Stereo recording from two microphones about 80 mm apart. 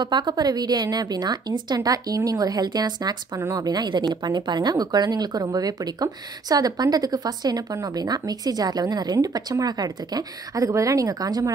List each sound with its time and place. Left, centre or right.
0.0 s a woman's voice: right